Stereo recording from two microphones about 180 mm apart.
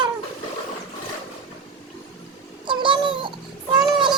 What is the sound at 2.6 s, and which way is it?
Cat, 25° right (ahead or behind).